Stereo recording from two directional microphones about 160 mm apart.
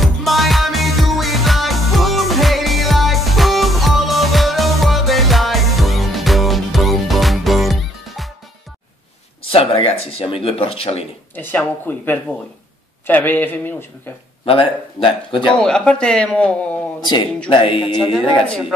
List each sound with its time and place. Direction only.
0.0 s music: centre (ahead or behind)
9.4 s a sound: 35° left (ahead or behind)
10.1 s speech: 35° left (ahead or behind)
11.3 s speech: 10° left (ahead or behind)
14.4 s speech: 35° left (ahead or behind)
15.5 s speech: 5° left (ahead or behind)
17.0 s speech: 30° left (ahead or behind)